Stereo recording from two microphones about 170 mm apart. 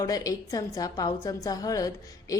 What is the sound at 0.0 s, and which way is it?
Speech, 20° left (ahead or behind).